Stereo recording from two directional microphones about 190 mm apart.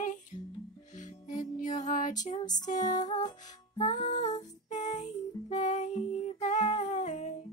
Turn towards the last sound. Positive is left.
turn(degrees=40)  # may be behind; listen again after turning